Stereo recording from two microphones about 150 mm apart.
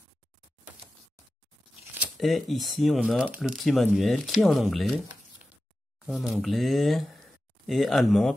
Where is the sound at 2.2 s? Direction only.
Centre (ahead or behind).